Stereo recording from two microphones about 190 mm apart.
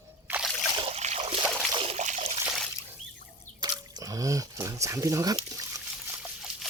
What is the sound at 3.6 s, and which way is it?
Drip, 20° right (ahead or behind).